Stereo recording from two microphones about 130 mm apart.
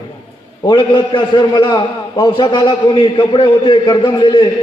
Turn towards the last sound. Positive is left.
turn(degrees=35)  # may be behind; listen again after turning